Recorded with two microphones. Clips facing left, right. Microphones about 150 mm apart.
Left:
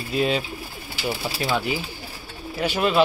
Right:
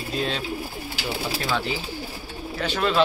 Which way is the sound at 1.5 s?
10° left (ahead or behind).